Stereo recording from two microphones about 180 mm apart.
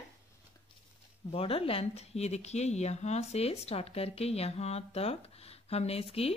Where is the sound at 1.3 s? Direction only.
30° left (ahead or behind).